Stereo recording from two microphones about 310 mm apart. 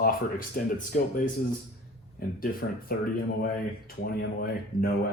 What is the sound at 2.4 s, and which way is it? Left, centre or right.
Speech, left.